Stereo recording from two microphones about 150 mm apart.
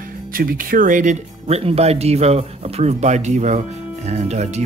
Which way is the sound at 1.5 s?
45° right (ahead or behind).